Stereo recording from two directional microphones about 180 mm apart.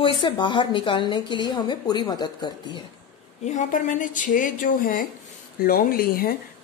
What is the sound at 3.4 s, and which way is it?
Speech, 40° left (ahead or behind).